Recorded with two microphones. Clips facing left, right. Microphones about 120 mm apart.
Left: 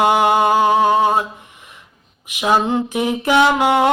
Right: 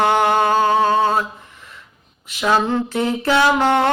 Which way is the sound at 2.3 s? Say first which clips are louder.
Left 1 dB; 15° left (ahead or behind).